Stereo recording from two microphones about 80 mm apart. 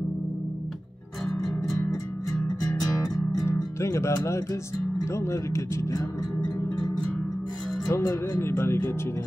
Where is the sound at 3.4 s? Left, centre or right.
Left.